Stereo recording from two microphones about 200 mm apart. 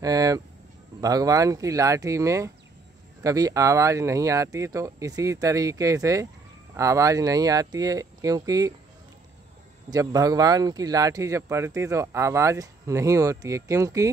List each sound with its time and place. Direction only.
0.0 s speech: 20° right (ahead or behind)
9.8 s speech: 20° right (ahead or behind)